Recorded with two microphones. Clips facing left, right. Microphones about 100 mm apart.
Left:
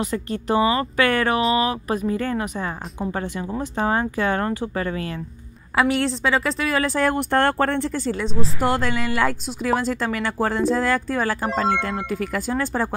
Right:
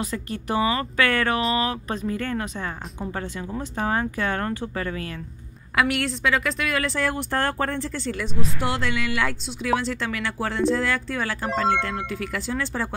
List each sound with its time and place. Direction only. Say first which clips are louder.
0.0 s a woman's voice: left 4 dB; 25° left (ahead or behind); by 8.0 s 60° left (ahead or behind)
8.1 s speech: left 4 dB; 30° left (ahead or behind)
8.5 s a woman's voice: left 4 dB; 45° left (ahead or behind)